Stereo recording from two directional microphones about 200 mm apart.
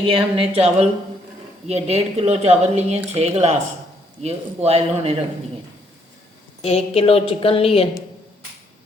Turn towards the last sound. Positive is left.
turn(degrees=30)  # may be behind; listen again after turning